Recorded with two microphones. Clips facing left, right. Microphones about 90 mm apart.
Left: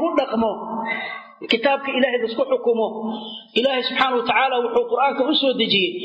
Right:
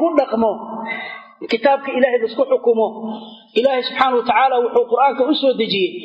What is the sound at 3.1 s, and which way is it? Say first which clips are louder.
Speech: right 4 dB; 20° right (ahead or behind).